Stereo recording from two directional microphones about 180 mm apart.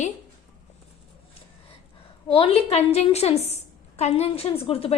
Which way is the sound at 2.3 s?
30° left (ahead or behind).